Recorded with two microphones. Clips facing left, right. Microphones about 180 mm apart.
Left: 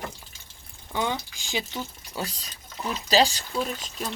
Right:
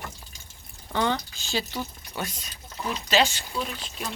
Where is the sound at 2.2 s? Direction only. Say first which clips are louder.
Left 1 dB; 35° left (ahead or behind).